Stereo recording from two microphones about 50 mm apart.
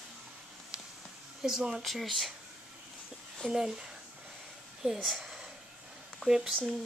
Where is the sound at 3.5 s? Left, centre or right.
Centre.